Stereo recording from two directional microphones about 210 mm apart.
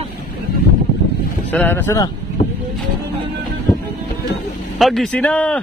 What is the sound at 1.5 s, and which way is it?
Speech, 10° left (ahead or behind).